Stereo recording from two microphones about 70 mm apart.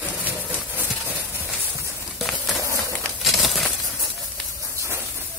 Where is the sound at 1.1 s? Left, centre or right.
Left.